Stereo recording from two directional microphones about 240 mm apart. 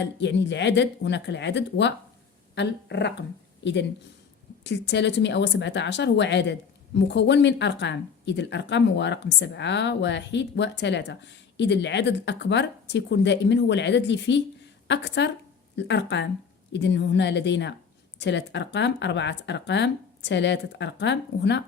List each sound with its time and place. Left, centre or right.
0.0 s a woman's voice: left